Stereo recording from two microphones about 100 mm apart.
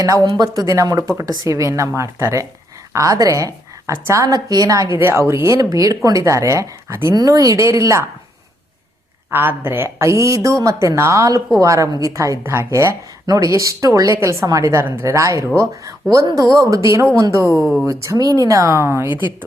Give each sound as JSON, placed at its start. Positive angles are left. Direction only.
{"t": 0.3, "sound": "a woman's voice", "side_deg": -45}
{"t": 4.9, "sound": "speech", "side_deg": -25}
{"t": 9.3, "sound": "speech", "side_deg": -20}
{"t": 17.6, "sound": "speech", "side_deg": 0}
{"t": 17.8, "sound": "speech", "side_deg": -30}